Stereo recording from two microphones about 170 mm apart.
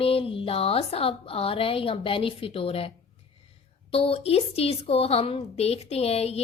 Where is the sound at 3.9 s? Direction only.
35° left (ahead or behind).